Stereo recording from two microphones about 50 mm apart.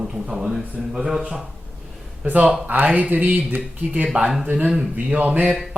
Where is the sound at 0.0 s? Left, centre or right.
Centre.